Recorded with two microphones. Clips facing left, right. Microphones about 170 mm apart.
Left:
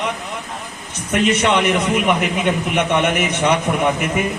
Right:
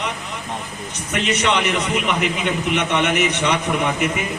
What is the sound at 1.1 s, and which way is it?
A man's voice, 50° left (ahead or behind).